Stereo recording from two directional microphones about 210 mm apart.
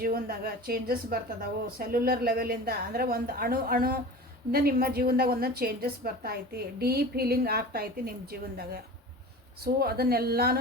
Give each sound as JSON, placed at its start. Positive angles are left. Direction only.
{"t": 0.0, "sound": "a woman's voice", "side_deg": -45}
{"t": 9.8, "sound": "a woman's voice", "side_deg": -45}